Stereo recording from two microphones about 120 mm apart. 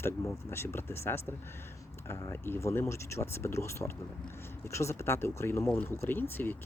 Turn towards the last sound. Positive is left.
turn(degrees=15)  # may be behind; listen again after turning